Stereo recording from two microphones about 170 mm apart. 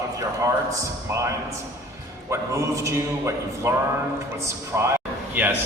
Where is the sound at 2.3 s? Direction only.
15° right (ahead or behind).